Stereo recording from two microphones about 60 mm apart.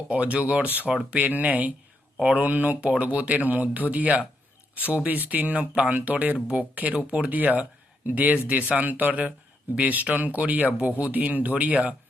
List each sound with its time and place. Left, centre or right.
0.1 s speech: right